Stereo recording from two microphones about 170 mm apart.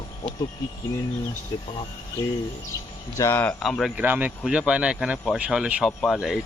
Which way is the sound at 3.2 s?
10° left (ahead or behind).